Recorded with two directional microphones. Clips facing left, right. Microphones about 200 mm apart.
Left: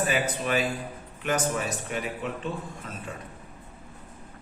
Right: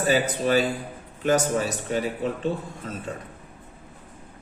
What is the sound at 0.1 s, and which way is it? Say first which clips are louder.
A man's voice: right 5 dB; 35° right (ahead or behind).